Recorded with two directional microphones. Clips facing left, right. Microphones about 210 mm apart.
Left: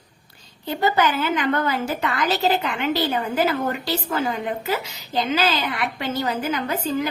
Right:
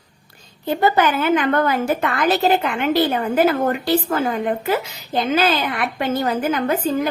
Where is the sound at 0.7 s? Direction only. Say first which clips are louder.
Right 3 dB; 55° right (ahead or behind).